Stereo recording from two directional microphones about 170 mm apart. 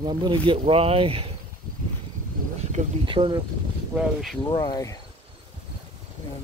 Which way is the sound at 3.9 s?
Centre (ahead or behind).